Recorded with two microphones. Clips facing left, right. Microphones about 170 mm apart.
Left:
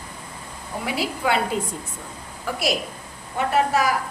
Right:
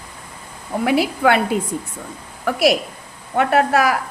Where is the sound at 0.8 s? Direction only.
65° right (ahead or behind).